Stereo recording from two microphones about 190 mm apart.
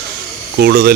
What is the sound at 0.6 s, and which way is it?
Speech, 55° right (ahead or behind).